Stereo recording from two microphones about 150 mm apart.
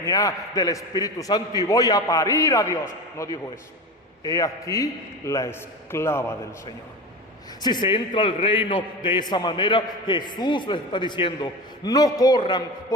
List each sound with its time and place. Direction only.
0.0 s a man's voice: 25° left (ahead or behind)
7.6 s a man's voice: 30° left (ahead or behind)